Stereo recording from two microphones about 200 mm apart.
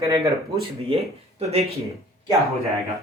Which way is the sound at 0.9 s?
30° right (ahead or behind).